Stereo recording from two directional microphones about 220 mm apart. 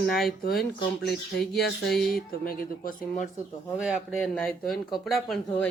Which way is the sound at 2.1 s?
40° left (ahead or behind).